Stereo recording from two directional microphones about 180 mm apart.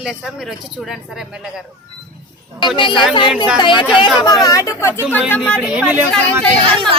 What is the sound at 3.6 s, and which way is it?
Speech, 25° left (ahead or behind).